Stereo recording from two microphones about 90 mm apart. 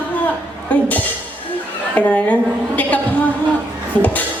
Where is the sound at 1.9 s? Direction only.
15° left (ahead or behind).